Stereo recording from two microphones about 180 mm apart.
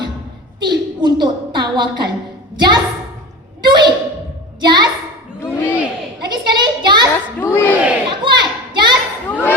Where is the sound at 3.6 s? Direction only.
25° right (ahead or behind).